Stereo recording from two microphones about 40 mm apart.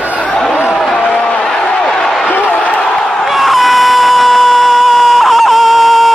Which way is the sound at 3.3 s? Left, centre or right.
Centre.